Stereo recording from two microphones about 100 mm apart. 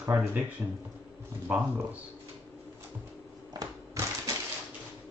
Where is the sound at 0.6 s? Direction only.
20° right (ahead or behind).